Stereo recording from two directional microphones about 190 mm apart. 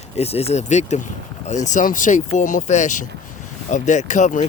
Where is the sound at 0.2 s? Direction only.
35° left (ahead or behind).